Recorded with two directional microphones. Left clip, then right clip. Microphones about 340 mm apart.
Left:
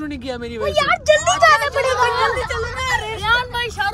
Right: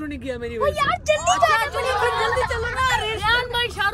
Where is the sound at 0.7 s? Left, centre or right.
Left.